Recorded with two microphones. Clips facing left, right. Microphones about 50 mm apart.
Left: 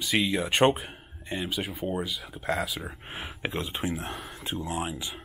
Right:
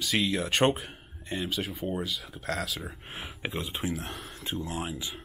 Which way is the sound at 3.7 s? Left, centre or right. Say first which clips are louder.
Left 2 dB; left.